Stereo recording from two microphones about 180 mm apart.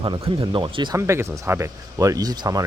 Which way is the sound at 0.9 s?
15° right (ahead or behind).